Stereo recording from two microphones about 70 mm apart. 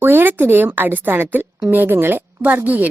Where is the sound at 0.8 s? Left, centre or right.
Right.